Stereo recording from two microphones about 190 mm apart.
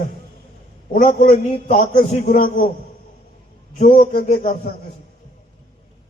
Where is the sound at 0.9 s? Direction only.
40° left (ahead or behind).